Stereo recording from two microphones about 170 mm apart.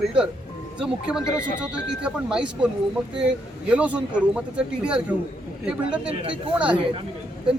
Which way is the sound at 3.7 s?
5° right (ahead or behind).